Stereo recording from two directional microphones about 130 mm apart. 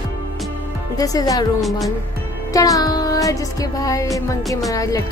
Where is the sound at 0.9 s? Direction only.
30° left (ahead or behind).